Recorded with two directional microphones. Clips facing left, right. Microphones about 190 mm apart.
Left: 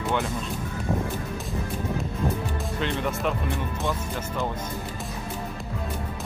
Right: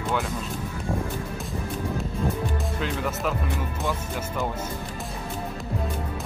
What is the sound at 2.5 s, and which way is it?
Speech, centre (ahead or behind).